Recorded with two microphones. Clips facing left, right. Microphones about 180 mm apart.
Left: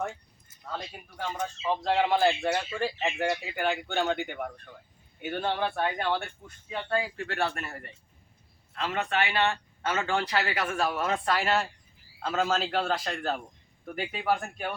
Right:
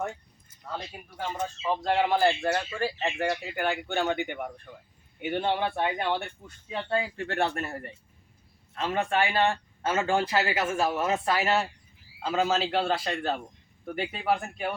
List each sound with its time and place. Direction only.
1.2 s speech: 5° right (ahead or behind)
2.4 s speech: 5° left (ahead or behind); by 7.5 s 25° right (ahead or behind)
8.8 s speech: 30° right (ahead or behind)
11.1 s speech: 5° right (ahead or behind)